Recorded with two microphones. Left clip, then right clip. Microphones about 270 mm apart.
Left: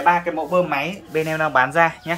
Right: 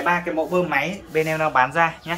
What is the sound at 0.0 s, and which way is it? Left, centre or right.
Speech, centre.